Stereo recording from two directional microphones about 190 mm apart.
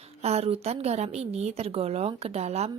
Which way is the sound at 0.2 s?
35° right (ahead or behind).